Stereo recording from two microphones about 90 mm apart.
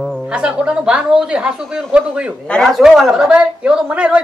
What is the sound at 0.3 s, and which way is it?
Speech, 15° right (ahead or behind).